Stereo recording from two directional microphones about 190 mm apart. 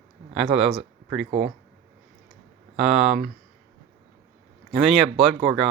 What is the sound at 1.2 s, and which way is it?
Speech, 30° right (ahead or behind).